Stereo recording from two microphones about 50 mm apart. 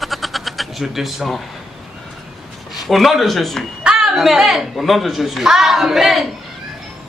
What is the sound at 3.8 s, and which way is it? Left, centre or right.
Speech, centre.